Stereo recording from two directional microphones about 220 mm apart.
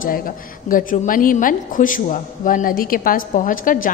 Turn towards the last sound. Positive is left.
turn(degrees=40)  # may be behind; listen again after turning